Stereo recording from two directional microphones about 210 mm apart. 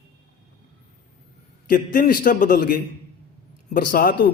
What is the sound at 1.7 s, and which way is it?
A man's voice, 40° left (ahead or behind).